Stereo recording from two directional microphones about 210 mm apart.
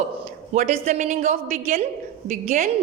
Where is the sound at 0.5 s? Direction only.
35° right (ahead or behind).